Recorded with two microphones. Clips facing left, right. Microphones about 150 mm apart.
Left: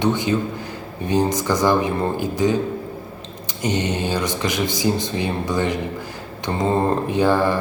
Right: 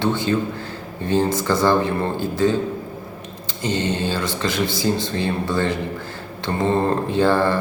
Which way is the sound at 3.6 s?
15° left (ahead or behind).